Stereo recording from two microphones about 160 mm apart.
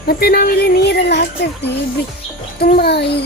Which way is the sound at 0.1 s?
75° left (ahead or behind).